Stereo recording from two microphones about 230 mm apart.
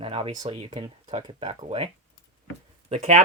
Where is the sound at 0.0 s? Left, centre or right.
Right.